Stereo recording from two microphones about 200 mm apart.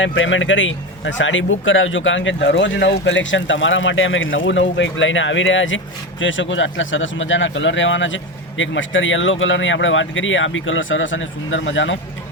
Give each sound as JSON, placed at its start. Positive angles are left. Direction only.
{"t": 0.0, "sound": "speech", "side_deg": 70}